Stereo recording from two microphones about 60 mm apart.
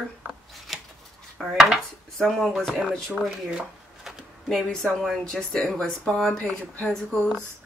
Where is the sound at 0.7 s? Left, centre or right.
Centre.